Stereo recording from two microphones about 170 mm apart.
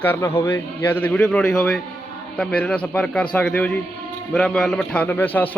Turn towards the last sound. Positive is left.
turn(degrees=10)  # may be behind; listen again after turning